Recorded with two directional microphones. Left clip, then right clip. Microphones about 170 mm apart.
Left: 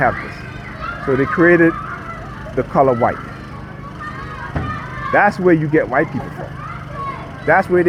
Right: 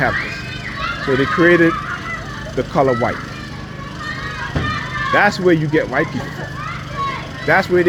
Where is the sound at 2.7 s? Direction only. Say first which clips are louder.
Left 2 dB; 45° left (ahead or behind).